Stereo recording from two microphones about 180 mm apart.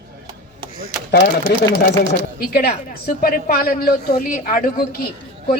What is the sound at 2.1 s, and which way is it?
A woman's voice, 55° left (ahead or behind).